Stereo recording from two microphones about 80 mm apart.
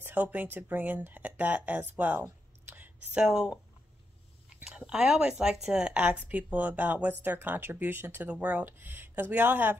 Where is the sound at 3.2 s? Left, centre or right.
Centre.